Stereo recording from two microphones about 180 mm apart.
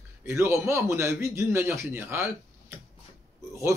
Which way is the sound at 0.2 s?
15° right (ahead or behind).